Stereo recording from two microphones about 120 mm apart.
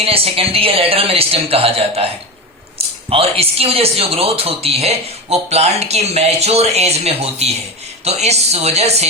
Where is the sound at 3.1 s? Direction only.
55° right (ahead or behind).